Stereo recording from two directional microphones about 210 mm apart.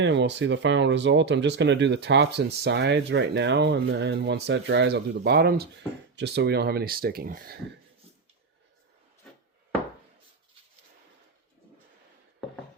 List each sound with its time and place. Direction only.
0.0 s speech: 60° right (ahead or behind)